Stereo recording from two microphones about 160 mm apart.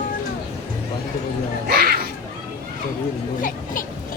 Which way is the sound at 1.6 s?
75° right (ahead or behind).